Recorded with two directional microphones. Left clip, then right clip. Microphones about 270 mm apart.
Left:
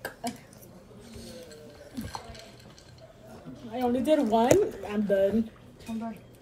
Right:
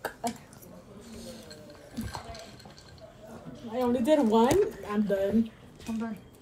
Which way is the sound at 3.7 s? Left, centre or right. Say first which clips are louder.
Even; centre.